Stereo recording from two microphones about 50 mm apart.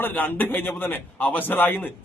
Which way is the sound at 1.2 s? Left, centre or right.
Left.